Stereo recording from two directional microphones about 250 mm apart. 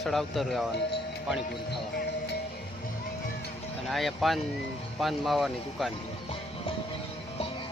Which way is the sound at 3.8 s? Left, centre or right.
Centre.